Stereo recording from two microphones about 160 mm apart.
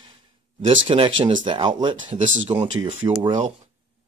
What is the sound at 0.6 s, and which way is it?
Speech, 35° right (ahead or behind).